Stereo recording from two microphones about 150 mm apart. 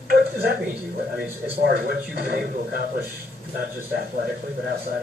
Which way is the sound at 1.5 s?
80° right.